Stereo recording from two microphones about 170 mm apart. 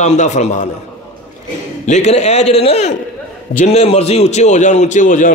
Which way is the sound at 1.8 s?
45° left (ahead or behind).